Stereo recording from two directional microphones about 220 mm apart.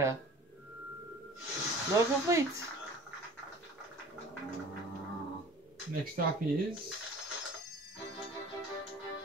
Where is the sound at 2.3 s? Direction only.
15° right (ahead or behind).